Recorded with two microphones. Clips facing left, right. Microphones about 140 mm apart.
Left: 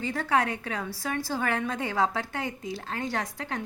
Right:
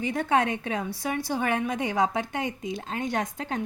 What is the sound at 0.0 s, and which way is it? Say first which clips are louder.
A woman's voice: right 2 dB; 20° right (ahead or behind).